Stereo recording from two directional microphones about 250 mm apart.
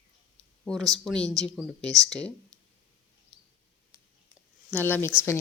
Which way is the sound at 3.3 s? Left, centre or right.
Centre.